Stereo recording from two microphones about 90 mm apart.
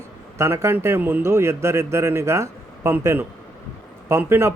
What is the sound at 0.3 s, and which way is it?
A man's voice, 30° right (ahead or behind).